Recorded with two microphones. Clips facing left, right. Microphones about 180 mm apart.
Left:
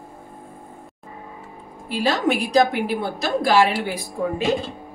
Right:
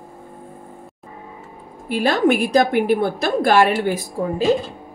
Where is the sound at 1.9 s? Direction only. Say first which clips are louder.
Right 4 dB; 55° right (ahead or behind).